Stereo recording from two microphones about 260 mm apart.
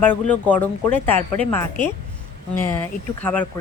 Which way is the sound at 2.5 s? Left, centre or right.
Centre.